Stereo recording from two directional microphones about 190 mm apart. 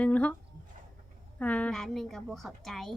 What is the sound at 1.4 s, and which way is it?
A woman's voice, 5° left (ahead or behind).